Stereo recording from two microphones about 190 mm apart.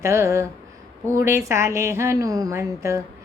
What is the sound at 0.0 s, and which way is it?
Mantra, 15° right (ahead or behind).